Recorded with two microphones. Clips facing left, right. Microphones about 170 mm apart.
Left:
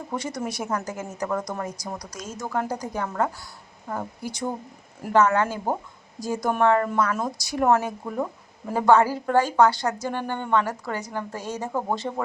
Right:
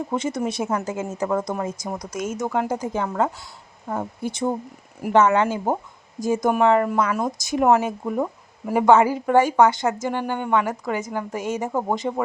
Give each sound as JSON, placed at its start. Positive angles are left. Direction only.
{"t": 0.1, "sound": "a woman's voice", "side_deg": -25}